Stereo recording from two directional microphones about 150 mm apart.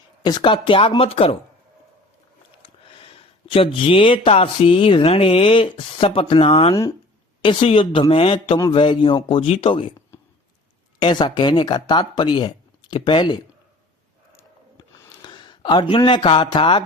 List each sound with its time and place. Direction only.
0.3 s speech: 30° left (ahead or behind)
2.6 s speech: 35° left (ahead or behind)
11.0 s speech: 30° left (ahead or behind)
15.2 s speech: 30° left (ahead or behind)